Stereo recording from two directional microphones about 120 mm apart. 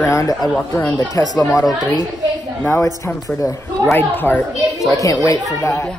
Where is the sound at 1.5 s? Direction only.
35° left (ahead or behind).